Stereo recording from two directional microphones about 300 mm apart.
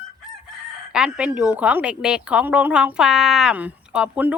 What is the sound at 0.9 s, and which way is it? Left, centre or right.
A woman's voice, centre.